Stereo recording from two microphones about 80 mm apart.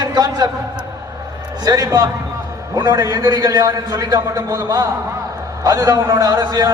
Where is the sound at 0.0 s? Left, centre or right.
Right.